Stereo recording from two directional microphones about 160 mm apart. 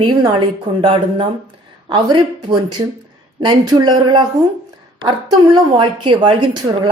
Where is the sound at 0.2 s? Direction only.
30° right (ahead or behind).